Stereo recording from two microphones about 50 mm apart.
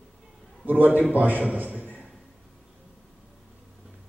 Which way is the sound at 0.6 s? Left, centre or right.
Right.